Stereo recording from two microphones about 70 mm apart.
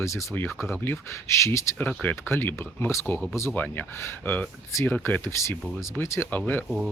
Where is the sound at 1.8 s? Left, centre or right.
Left.